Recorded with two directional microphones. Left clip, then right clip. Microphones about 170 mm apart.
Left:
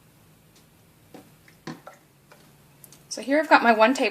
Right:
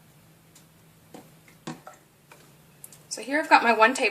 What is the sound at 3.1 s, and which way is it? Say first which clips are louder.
Speech: left 1 dB; 35° left (ahead or behind).